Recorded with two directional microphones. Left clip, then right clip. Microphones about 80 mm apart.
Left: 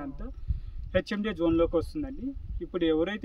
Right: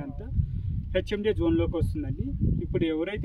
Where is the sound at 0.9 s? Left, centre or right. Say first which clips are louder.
Right 3 dB; left.